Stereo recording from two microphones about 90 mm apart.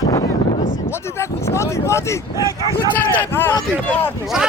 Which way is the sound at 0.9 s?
30° left (ahead or behind).